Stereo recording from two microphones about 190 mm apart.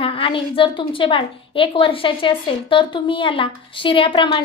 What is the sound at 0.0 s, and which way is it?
A woman's voice, 30° left (ahead or behind).